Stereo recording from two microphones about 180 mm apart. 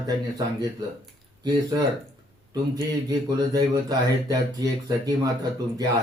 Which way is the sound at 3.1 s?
20° right (ahead or behind).